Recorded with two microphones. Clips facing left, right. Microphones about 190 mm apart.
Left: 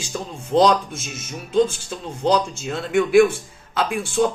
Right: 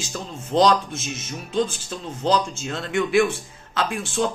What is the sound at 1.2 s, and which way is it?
A man's voice, 10° left (ahead or behind).